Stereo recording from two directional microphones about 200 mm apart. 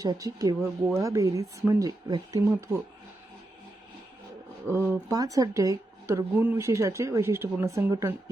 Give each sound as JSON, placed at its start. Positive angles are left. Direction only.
{"t": 0.0, "sound": "speech", "side_deg": -15}
{"t": 4.7, "sound": "speech", "side_deg": -10}